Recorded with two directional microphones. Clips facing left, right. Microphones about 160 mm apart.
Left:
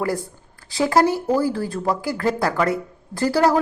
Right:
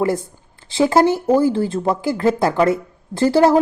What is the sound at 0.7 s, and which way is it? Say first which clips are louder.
Speech: right 3 dB; 25° right (ahead or behind).